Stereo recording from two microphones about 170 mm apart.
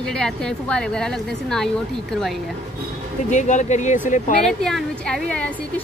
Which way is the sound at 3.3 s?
45° left (ahead or behind).